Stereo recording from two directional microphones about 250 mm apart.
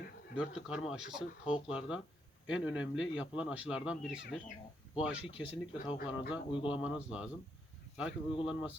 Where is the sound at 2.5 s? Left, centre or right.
Centre.